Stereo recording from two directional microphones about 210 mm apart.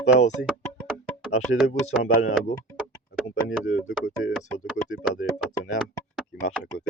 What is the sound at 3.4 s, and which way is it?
Speech, 50° left (ahead or behind).